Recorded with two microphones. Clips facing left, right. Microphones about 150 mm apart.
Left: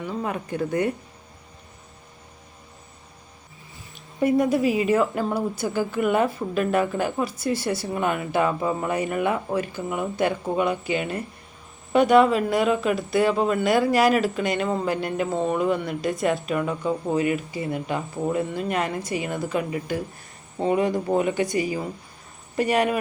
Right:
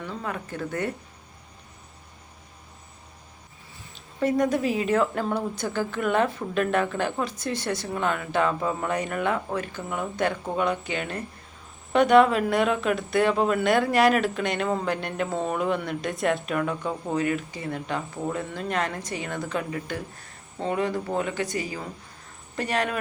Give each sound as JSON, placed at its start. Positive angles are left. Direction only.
{"t": 0.0, "sound": "speech", "side_deg": 15}
{"t": 4.2, "sound": "a woman's voice", "side_deg": 10}